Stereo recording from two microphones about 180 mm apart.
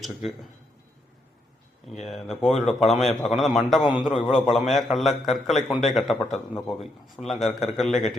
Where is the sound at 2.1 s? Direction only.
Centre (ahead or behind).